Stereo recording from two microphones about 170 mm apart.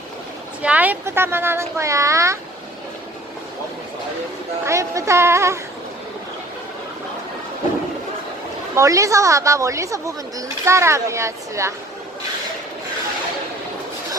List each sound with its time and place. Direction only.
0.6 s speech: 10° right (ahead or behind)
4.6 s speech: 15° right (ahead or behind)
8.7 s speech: 20° right (ahead or behind)